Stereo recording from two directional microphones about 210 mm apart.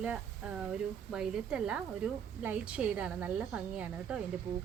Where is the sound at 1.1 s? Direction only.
5° right (ahead or behind).